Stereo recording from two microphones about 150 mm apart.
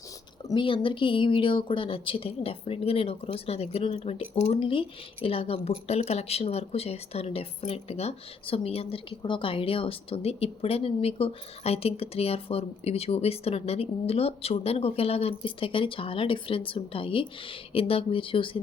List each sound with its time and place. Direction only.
0.4 s speech: 35° left (ahead or behind)